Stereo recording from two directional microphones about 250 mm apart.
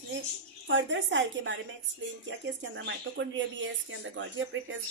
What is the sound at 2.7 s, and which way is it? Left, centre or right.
Speech, right.